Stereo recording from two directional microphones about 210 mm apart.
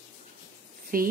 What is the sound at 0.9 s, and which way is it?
Speech, 45° right (ahead or behind).